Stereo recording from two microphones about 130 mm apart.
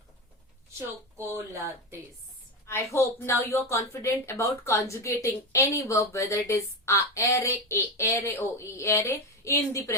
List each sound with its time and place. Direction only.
2.6 s a woman's voice: 20° left (ahead or behind)